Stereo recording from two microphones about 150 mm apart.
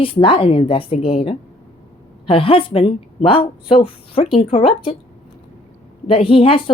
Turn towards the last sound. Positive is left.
turn(degrees=40)  # may be behind; listen again after turning